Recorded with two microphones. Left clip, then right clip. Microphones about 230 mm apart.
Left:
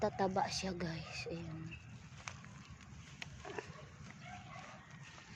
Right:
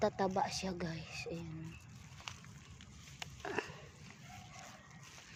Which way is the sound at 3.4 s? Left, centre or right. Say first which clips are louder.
Right 7 dB; right.